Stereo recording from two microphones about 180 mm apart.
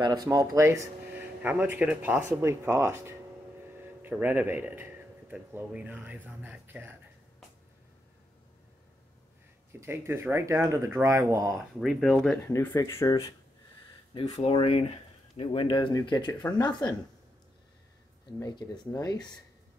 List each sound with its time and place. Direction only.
0.0 s speech: 20° right (ahead or behind)
9.7 s speech: 15° right (ahead or behind)
11.5 s speech: centre (ahead or behind)
12.5 s speech: 15° left (ahead or behind)
14.4 s speech: 35° left (ahead or behind)
18.4 s speech: 20° left (ahead or behind)